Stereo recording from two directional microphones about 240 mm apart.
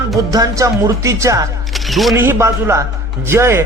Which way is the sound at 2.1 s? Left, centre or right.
Centre.